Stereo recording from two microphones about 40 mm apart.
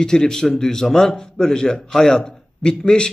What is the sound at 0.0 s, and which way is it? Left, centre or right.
A man's voice, centre.